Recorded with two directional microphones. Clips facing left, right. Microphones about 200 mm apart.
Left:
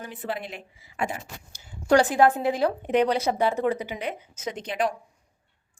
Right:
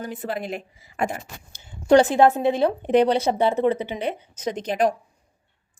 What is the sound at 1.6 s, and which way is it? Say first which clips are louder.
A woman's voice: right 4 dB; 25° right (ahead or behind).